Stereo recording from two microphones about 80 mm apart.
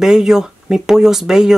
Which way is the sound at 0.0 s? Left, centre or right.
Centre.